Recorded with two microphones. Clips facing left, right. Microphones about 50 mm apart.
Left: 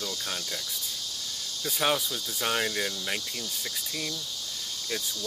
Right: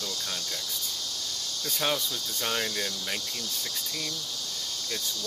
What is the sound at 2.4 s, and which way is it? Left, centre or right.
Speech, centre.